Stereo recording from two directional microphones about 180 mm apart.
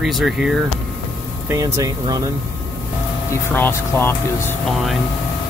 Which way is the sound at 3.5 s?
10° left (ahead or behind).